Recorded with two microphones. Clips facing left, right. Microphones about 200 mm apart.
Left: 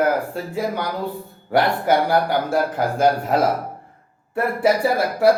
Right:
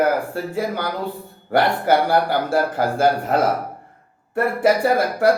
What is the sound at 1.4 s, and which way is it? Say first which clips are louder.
Speech: right 1 dB; 5° left (ahead or behind).